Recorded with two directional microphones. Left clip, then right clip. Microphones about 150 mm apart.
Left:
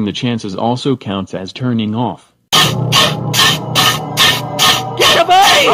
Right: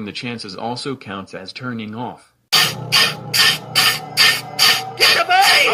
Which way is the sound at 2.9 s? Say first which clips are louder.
Left 4 dB; 35° left (ahead or behind).